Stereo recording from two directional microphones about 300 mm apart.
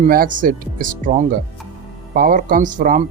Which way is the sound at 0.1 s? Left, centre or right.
Right.